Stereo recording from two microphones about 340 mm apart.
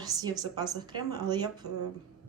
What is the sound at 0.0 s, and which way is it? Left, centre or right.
A woman's voice, centre.